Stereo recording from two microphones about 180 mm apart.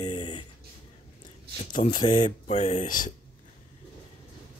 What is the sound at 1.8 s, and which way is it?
Speech, 40° left (ahead or behind).